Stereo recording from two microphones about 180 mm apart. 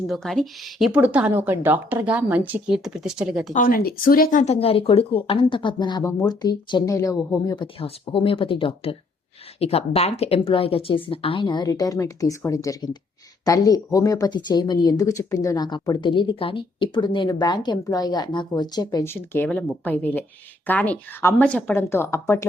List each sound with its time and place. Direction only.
0.1 s a woman's voice: centre (ahead or behind)
3.5 s speech: 50° left (ahead or behind); by 7.7 s 20° left (ahead or behind)
7.8 s speech: 30° left (ahead or behind); by 22.4 s 15° left (ahead or behind)